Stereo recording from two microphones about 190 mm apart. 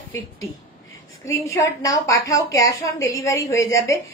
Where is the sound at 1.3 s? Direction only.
15° left (ahead or behind).